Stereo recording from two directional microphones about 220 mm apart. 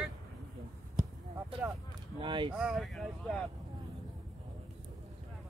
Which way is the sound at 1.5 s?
25° right (ahead or behind).